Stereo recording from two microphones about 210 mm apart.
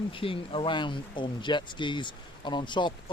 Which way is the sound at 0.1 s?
25° left (ahead or behind).